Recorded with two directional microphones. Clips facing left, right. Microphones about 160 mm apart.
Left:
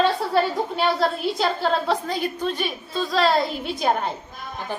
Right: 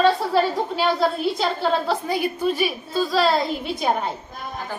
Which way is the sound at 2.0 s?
10° right (ahead or behind).